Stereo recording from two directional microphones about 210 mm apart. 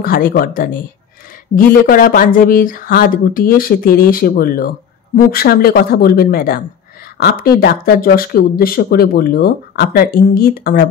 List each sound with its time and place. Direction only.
0.0 s speech: 40° left (ahead or behind)
1.9 s speech: 40° left (ahead or behind)